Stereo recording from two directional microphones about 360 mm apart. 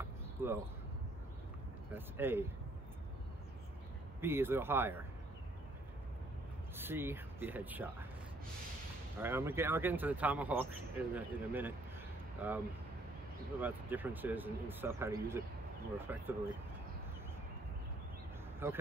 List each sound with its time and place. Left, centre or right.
0.0 s a sound: centre
2.0 s speech: centre
4.2 s speech: centre
6.8 s speech: centre
9.2 s speech: centre
18.6 s speech: centre